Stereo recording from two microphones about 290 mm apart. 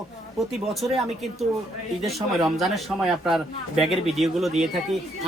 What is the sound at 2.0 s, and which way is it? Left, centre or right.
Speech, centre.